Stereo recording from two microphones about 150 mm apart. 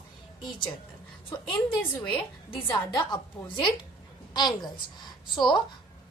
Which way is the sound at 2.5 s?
35° left (ahead or behind).